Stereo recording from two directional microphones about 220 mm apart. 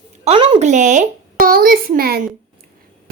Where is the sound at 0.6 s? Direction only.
35° right (ahead or behind).